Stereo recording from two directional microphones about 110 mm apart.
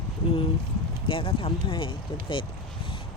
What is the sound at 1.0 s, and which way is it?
Speech, 55° left (ahead or behind).